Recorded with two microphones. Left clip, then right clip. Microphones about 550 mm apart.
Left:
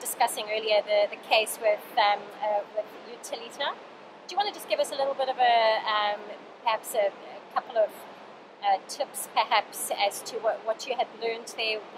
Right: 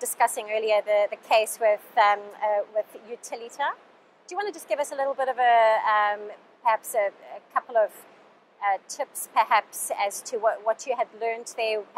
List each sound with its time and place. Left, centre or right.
0.2 s a woman's voice: right
3.3 s a woman's voice: right